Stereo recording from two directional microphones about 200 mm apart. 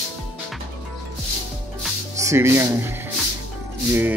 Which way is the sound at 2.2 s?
15° right (ahead or behind).